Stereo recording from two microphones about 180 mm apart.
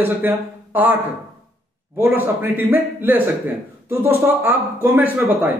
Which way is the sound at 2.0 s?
10° right (ahead or behind).